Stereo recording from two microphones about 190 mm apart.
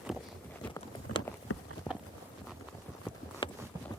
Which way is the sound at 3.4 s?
25° left (ahead or behind).